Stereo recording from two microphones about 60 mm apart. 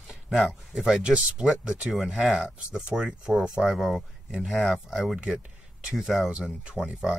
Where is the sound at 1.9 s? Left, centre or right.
Centre.